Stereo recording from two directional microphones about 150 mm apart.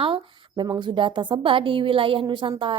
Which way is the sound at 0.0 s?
35° right (ahead or behind).